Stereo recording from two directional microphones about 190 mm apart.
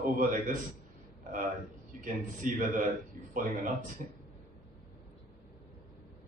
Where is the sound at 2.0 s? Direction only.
45° right (ahead or behind).